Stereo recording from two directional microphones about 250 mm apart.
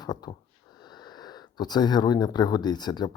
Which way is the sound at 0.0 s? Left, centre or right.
Centre.